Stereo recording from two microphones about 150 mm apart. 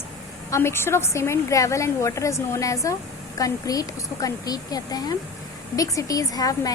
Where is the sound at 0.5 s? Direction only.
15° left (ahead or behind).